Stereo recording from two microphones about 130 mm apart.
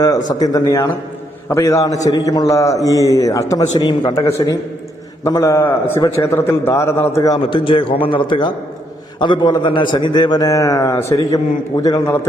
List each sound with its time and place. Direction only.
0.3 s a man's voice: 30° left (ahead or behind)
7.3 s a man's voice: 40° left (ahead or behind); by 12.2 s 25° left (ahead or behind)